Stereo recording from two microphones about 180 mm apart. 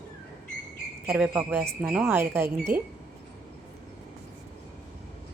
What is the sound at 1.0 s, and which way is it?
A woman's voice, 5° right (ahead or behind).